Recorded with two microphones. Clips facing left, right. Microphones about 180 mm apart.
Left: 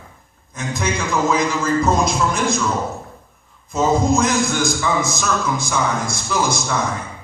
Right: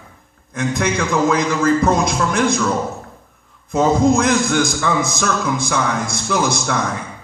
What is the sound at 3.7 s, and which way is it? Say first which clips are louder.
A man's voice: right 3 dB; 60° right (ahead or behind).